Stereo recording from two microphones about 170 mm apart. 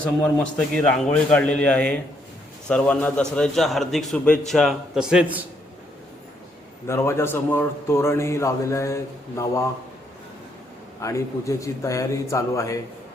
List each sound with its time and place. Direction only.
0.0 s a man's voice: 5° left (ahead or behind)
6.8 s a man's voice: 15° left (ahead or behind)
11.0 s a man's voice: 20° left (ahead or behind)